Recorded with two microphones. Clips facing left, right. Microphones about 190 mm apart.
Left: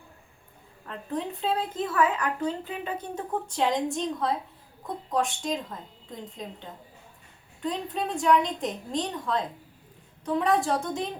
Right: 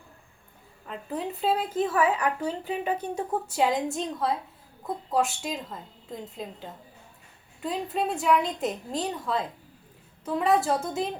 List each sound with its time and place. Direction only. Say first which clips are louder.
0.9 s a woman's voice: even; 5° right (ahead or behind)